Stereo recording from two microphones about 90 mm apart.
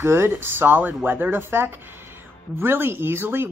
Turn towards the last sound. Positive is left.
turn(degrees=-25)  # may be behind; listen again after turning